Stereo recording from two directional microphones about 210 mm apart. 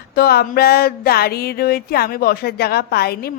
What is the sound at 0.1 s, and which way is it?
A woman's voice, 50° left (ahead or behind).